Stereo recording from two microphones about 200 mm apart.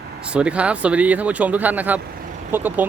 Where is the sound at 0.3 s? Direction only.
5° right (ahead or behind).